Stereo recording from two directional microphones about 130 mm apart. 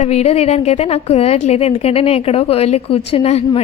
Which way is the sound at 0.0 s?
55° left (ahead or behind).